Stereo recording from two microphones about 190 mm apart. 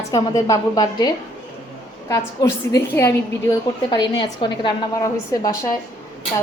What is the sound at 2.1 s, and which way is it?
A woman's voice, 15° left (ahead or behind).